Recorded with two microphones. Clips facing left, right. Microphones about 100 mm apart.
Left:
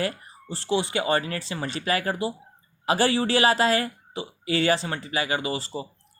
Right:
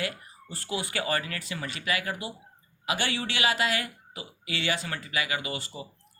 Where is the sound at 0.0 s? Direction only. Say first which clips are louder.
Left 5 dB; 30° left (ahead or behind).